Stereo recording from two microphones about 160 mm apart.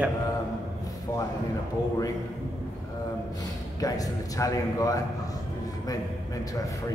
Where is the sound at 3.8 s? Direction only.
20° left (ahead or behind).